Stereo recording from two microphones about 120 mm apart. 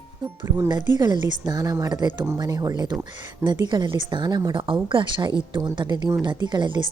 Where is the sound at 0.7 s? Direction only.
35° right (ahead or behind).